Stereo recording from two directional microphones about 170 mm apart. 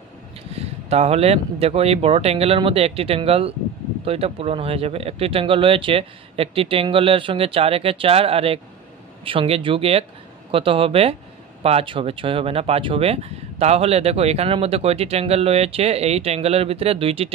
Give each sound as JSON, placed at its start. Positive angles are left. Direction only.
{"t": 0.5, "sound": "speech", "side_deg": -35}